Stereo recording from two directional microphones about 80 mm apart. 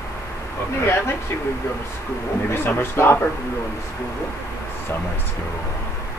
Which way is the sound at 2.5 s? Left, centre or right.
Left.